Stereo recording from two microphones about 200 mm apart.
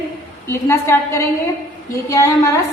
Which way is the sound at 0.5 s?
15° left (ahead or behind).